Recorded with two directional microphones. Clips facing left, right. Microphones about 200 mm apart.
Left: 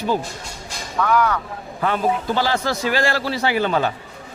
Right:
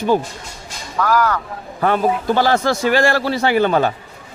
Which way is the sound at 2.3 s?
50° right (ahead or behind).